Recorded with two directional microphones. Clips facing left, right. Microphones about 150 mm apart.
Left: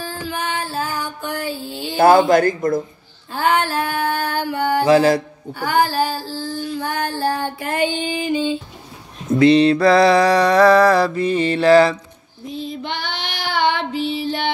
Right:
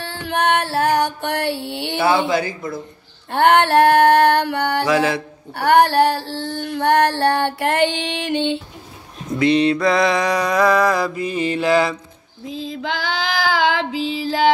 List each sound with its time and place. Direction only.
0.0 s music: 70° right (ahead or behind)
2.0 s speech: 45° left (ahead or behind)
3.3 s female singing: 70° right (ahead or behind)
4.8 s mantra: 35° left (ahead or behind)
5.5 s female singing: 70° right (ahead or behind)
9.3 s mantra: 30° left (ahead or behind)
10.8 s mantra: 15° right (ahead or behind)
12.5 s female singing: 90° right
13.7 s child singing: 90° right